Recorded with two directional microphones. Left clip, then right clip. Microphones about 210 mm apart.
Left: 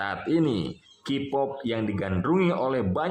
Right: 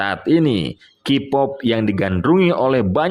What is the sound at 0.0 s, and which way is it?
Speech, 30° right (ahead or behind).